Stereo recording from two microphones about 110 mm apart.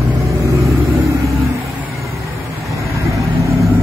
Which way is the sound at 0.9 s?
30° right (ahead or behind).